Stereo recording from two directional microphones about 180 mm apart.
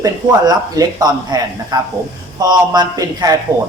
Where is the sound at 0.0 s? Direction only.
20° right (ahead or behind).